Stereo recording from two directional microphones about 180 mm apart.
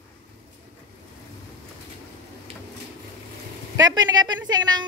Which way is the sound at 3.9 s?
25° right (ahead or behind).